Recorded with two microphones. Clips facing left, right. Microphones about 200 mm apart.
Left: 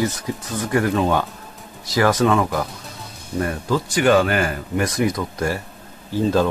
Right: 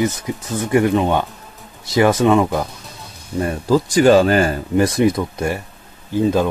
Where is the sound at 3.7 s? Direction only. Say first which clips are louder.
Right 5 dB; 35° right (ahead or behind).